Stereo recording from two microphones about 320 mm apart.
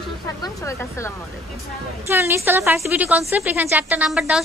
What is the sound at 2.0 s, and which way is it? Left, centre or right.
A woman's voice, centre.